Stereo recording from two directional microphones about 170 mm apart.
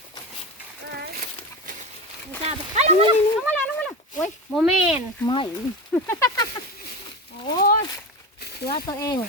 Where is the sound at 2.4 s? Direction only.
40° right (ahead or behind).